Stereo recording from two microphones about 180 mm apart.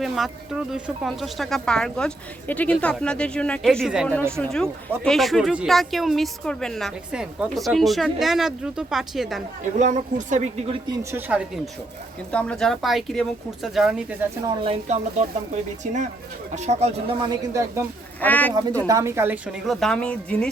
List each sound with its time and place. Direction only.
0.0 s speech: centre (ahead or behind)
9.7 s a woman's voice: 45° right (ahead or behind)
11.1 s speech: 5° right (ahead or behind)
14.6 s a woman's voice: 35° right (ahead or behind)
17.2 s speech: 20° right (ahead or behind)
18.2 s speech: 10° left (ahead or behind)
18.9 s speech: 15° right (ahead or behind); by 20.5 s 5° left (ahead or behind)